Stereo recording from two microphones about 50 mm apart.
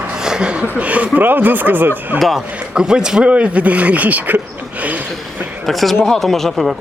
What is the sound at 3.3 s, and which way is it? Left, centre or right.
Speech, right.